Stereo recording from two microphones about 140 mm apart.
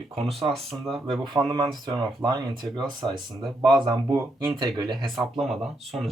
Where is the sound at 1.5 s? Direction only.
30° right (ahead or behind).